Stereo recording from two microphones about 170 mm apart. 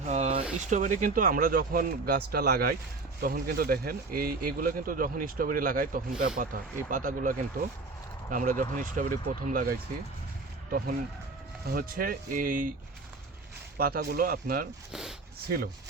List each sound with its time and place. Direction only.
0.0 s a sound: 45° right (ahead or behind)
0.6 s speech: 50° right (ahead or behind)
13.7 s speech: 60° right (ahead or behind)